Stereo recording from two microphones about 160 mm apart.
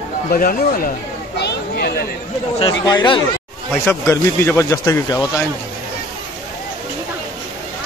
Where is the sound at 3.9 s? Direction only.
15° left (ahead or behind).